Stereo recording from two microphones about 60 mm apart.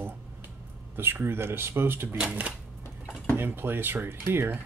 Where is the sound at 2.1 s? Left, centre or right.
Centre.